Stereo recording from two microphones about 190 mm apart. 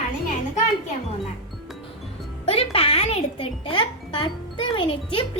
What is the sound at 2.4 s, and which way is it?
A child's voice, 30° left (ahead or behind).